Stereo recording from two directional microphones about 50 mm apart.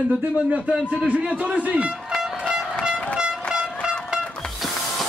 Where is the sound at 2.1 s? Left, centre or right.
Centre.